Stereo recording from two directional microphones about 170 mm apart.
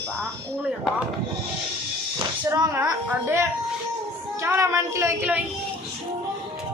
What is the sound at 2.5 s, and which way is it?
A woman's voice, 20° right (ahead or behind).